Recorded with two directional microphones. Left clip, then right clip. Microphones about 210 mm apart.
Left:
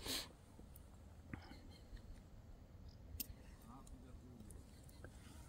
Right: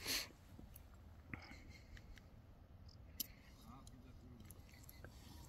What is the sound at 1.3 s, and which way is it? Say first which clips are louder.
Whispering: right 2 dB; 15° left (ahead or behind).